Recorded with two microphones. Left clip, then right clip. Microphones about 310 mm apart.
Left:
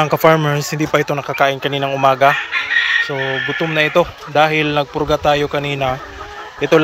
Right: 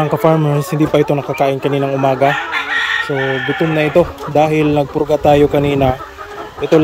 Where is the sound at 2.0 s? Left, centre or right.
Left.